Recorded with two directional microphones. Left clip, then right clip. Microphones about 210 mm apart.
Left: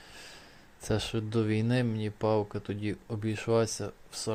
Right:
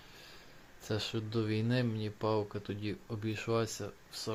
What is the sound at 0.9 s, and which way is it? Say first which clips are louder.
Speech: left 5 dB; 15° left (ahead or behind).